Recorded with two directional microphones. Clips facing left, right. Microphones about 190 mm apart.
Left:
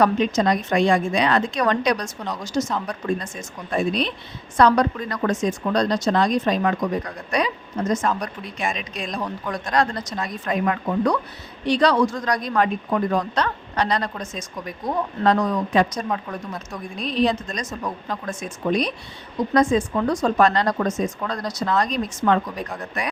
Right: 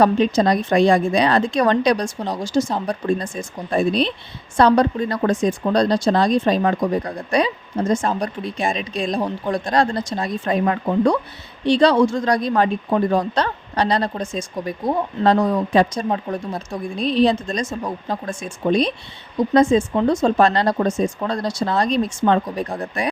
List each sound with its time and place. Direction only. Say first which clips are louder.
0.0 s speech: right 3 dB; 30° right (ahead or behind)